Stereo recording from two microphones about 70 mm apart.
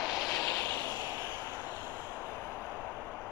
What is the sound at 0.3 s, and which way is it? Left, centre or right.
Vehicle, left.